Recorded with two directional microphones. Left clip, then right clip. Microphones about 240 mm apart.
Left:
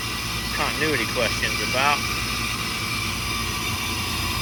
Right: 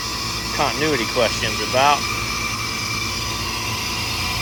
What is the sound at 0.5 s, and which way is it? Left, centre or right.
Speech, centre.